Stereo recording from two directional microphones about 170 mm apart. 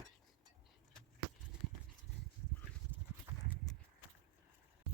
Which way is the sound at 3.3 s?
15° right (ahead or behind).